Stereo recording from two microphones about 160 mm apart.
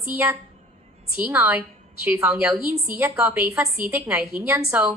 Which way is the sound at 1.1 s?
10° right (ahead or behind).